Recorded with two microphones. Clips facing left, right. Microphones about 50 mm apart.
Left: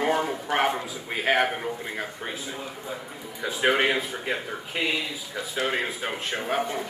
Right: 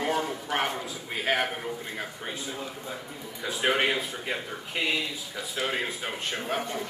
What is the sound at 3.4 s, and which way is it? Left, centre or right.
Speech, centre.